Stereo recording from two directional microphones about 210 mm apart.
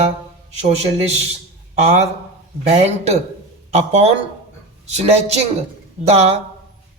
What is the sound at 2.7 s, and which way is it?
A woman's voice, 30° right (ahead or behind).